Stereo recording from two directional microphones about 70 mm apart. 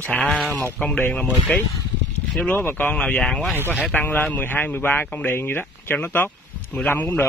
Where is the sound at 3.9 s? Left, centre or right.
Left.